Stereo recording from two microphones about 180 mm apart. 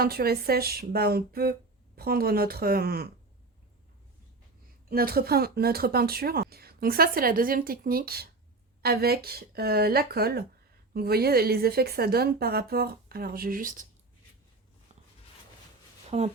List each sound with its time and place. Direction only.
0.0 s speech: 60° right (ahead or behind)
4.9 s speech: 55° right (ahead or behind)
16.0 s speech: 35° right (ahead or behind)